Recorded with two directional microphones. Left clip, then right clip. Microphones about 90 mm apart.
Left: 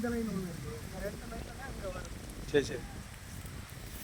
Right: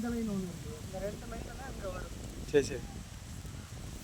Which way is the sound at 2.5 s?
50° right (ahead or behind).